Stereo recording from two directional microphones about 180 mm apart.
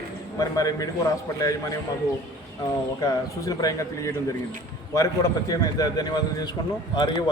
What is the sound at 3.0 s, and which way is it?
A man's voice, 20° left (ahead or behind).